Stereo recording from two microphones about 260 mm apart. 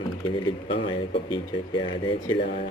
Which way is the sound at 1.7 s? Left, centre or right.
Centre.